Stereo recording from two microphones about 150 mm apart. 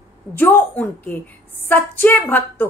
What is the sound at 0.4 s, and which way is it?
Speech, 10° left (ahead or behind).